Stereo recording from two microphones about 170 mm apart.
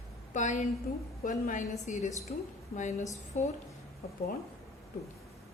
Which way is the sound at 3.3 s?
50° left (ahead or behind).